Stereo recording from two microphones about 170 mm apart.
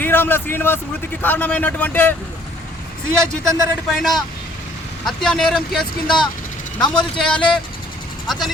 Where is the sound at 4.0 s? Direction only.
Centre (ahead or behind).